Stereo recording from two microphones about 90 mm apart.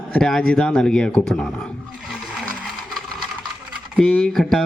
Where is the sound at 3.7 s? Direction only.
5° left (ahead or behind).